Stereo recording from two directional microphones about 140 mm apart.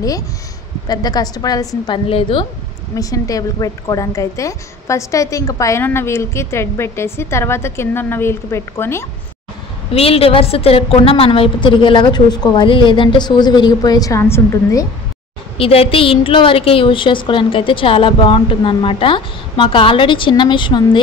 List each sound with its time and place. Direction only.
0.8 s a woman's voice: 30° left (ahead or behind)
2.0 s a woman's voice: 40° left (ahead or behind)
3.0 s a woman's voice: 25° left (ahead or behind)
9.9 s a woman's voice: 45° left (ahead or behind); by 14.9 s 20° left (ahead or behind)
15.5 s a woman's voice: 40° left (ahead or behind)